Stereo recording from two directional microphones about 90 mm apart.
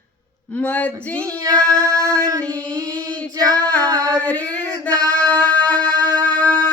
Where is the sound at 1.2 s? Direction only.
35° right (ahead or behind).